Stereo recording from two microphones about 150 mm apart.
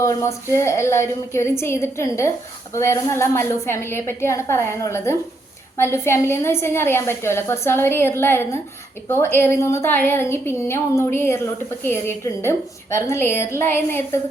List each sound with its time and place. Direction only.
0.0 s a woman's voice: 20° left (ahead or behind)